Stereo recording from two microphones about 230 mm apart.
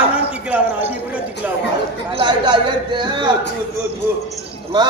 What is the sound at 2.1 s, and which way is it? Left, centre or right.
A man's voice, centre.